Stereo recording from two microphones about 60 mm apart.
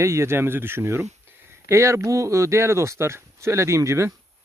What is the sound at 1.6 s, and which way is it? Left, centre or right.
Speech, right.